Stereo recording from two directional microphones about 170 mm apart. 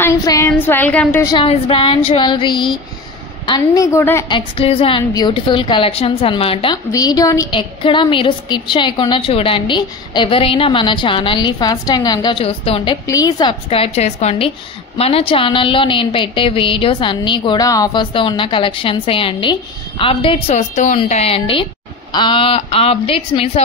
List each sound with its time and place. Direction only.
0.0 s a woman's voice: 20° left (ahead or behind)
1.2 s a woman's voice: 30° left (ahead or behind)
4.3 s a woman's voice: 35° left (ahead or behind)
6.9 s a woman's voice: 20° left (ahead or behind)
13.0 s a woman's voice: 20° left (ahead or behind)